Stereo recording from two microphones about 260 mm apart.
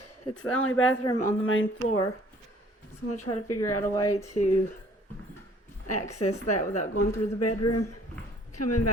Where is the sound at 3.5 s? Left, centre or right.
Left.